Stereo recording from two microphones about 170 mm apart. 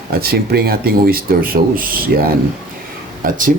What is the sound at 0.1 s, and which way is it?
Speech, 65° right (ahead or behind).